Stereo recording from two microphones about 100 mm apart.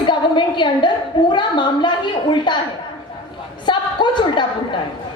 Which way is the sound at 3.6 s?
50° left (ahead or behind).